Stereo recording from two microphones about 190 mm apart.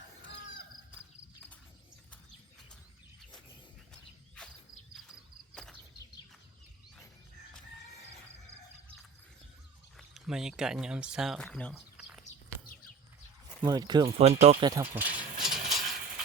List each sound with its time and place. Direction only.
10.0 s speech: centre (ahead or behind)
11.7 s a sound: 5° right (ahead or behind)
13.6 s speech: 20° right (ahead or behind)
14.2 s speech: 35° right (ahead or behind)
14.6 s speech: 20° right (ahead or behind)
14.9 s rattle: 10° right (ahead or behind)